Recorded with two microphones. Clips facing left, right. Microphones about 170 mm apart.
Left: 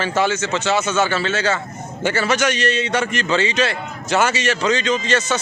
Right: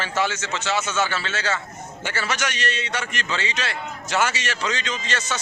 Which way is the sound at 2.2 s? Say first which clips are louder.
Left 7 dB; 25° left (ahead or behind).